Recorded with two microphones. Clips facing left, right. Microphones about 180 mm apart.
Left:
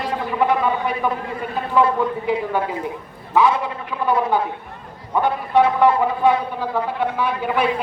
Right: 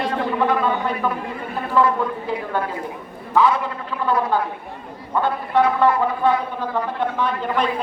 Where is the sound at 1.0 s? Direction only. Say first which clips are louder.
Left 1 dB; 15° left (ahead or behind).